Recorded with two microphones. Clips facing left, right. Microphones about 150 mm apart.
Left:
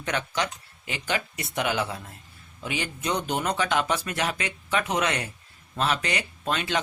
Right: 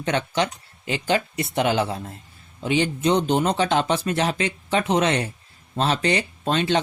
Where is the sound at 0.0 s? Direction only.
30° right (ahead or behind).